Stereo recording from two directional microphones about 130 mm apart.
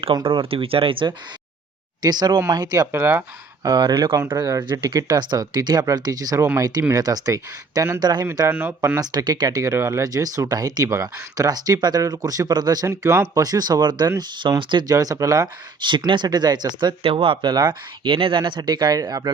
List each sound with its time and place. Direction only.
0.3 s speech: 45° right (ahead or behind)
2.0 s speech: 30° right (ahead or behind)
3.6 s speech: 30° right (ahead or behind)
8.4 s speech: 15° right (ahead or behind)
9.0 s speech: 30° right (ahead or behind)
13.3 s speech: 30° right (ahead or behind)